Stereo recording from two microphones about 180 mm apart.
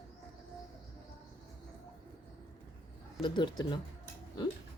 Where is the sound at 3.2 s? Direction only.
25° left (ahead or behind).